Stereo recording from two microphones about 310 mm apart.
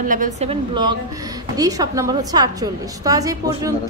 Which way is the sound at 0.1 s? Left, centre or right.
Right.